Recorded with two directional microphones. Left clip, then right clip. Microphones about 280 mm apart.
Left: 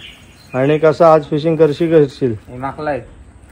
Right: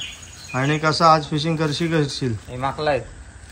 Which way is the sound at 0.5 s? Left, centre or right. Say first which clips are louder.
Left 8 dB; centre.